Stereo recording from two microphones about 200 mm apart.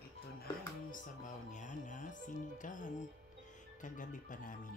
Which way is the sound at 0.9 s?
40° left (ahead or behind).